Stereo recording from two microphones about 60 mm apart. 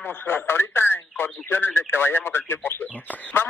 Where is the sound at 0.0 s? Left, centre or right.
Left.